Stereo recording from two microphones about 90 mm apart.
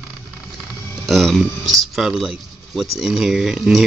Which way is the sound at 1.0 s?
Centre (ahead or behind).